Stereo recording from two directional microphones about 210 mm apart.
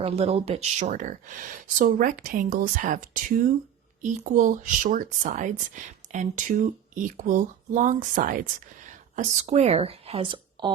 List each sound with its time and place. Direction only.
0.0 s speech: 30° right (ahead or behind)